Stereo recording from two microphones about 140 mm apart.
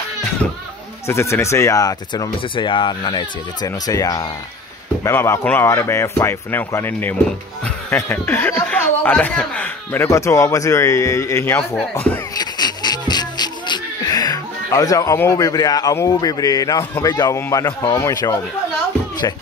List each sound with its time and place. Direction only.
1.0 s speech: 20° left (ahead or behind)
12.4 s music: 30° left (ahead or behind)
17.0 s speech: 25° left (ahead or behind)